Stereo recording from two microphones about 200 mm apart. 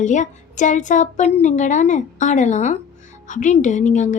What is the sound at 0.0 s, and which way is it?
A woman's voice, 40° left (ahead or behind).